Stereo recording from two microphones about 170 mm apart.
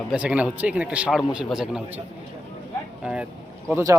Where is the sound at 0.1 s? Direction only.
5° right (ahead or behind).